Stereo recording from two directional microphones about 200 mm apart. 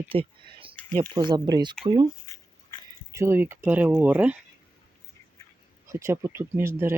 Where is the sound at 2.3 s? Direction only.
15° left (ahead or behind).